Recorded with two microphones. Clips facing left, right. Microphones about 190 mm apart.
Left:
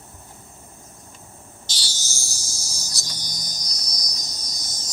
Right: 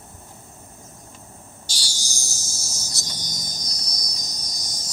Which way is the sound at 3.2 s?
20° right (ahead or behind).